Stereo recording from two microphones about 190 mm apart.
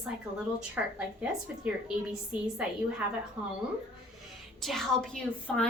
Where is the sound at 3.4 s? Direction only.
25° right (ahead or behind).